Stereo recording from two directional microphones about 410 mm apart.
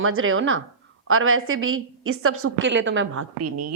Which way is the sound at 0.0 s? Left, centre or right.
Right.